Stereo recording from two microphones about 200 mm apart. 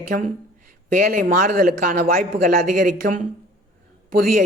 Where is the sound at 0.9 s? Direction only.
45° right (ahead or behind).